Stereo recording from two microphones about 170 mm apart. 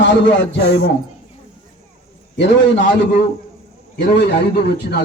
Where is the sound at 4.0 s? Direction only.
75° left (ahead or behind).